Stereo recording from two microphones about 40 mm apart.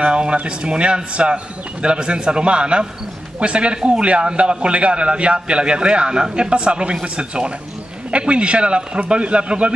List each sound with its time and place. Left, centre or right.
0.0 s a man's voice: right